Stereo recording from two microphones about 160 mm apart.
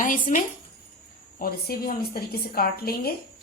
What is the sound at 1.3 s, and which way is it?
A woman's voice, 65° left (ahead or behind).